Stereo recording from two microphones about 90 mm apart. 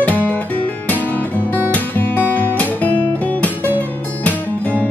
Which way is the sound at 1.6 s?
20° left (ahead or behind).